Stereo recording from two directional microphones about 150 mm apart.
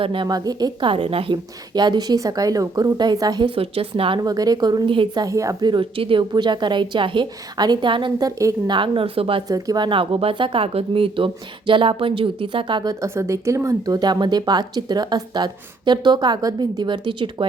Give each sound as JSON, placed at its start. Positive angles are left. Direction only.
{"t": 0.0, "sound": "speech", "side_deg": -35}
{"t": 4.2, "sound": "speech", "side_deg": -25}
{"t": 9.5, "sound": "speech", "side_deg": -25}